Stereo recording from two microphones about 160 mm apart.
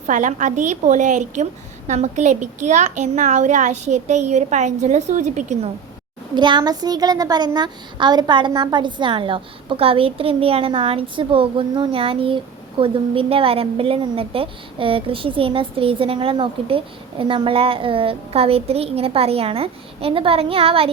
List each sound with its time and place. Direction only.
0.1 s a child's voice: 50° right (ahead or behind)
6.3 s a woman's voice: 30° right (ahead or behind)